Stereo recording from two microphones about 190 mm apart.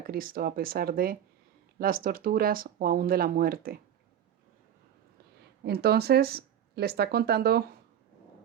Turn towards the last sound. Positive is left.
turn(degrees=-55)  # may be behind; listen again after turning